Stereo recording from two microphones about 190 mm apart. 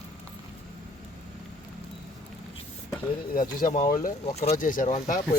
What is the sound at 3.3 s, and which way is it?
Speech, 40° left (ahead or behind).